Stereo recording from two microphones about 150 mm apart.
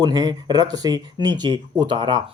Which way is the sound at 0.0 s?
25° right (ahead or behind).